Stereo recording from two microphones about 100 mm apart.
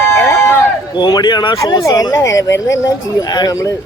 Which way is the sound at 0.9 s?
50° left (ahead or behind).